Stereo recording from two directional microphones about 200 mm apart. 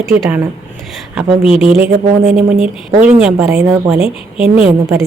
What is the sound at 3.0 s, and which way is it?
Speech, 5° right (ahead or behind).